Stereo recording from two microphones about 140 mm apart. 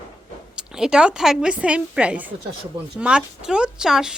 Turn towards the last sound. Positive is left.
turn(degrees=-5)  # may be behind; listen again after turning